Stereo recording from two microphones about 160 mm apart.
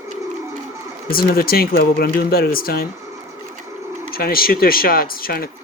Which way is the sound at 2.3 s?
70° left (ahead or behind).